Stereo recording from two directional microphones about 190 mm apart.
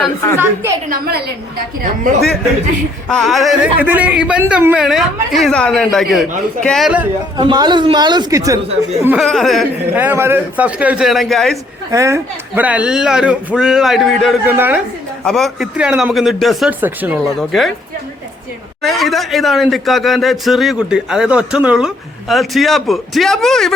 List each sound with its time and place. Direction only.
0.9 s a woman's voice: 55° right (ahead or behind)
3.1 s speech: centre (ahead or behind)
7.3 s speech: 20° right (ahead or behind)
9.0 s speech: centre (ahead or behind)
10.0 s a man's voice: 10° right (ahead or behind)
11.9 s a man's voice: 15° right (ahead or behind)
15.2 s speech: centre (ahead or behind)
18.8 s speech: centre (ahead or behind)